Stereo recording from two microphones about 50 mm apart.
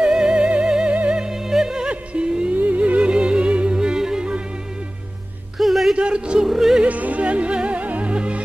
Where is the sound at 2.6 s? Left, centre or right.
Right; by 4.1 s centre.